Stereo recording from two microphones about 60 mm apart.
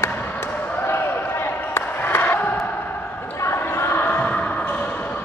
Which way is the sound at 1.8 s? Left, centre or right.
Left.